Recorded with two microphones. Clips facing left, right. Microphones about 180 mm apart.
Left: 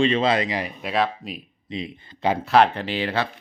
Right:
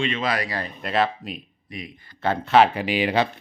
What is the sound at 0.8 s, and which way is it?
Speech, centre (ahead or behind).